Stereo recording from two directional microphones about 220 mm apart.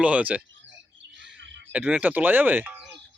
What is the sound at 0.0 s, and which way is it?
Speech, 5° right (ahead or behind).